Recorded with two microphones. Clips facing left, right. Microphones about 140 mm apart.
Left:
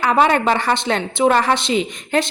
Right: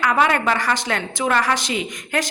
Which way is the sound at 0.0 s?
30° left (ahead or behind).